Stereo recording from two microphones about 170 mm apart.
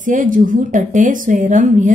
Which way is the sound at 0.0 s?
50° right (ahead or behind).